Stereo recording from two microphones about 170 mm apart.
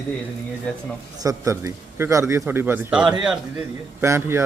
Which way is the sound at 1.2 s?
20° right (ahead or behind).